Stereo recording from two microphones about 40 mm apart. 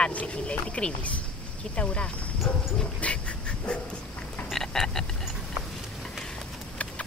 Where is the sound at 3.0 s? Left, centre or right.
Left.